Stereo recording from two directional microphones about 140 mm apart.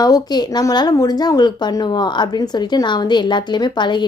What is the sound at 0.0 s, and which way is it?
A woman's voice, 30° left (ahead or behind).